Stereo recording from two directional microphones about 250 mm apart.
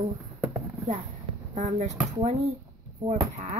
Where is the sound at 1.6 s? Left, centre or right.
Right.